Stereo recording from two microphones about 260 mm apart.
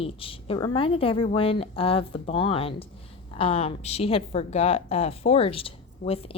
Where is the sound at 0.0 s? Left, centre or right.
Left.